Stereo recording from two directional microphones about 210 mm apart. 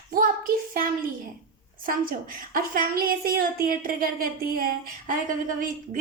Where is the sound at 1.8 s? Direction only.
40° right (ahead or behind).